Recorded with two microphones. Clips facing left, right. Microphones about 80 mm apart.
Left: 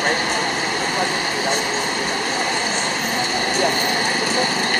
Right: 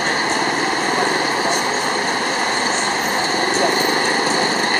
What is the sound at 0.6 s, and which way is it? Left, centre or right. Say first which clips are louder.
Vehicle: right 3 dB; right.